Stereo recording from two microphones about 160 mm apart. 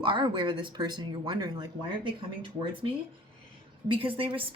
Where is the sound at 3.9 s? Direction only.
35° right (ahead or behind).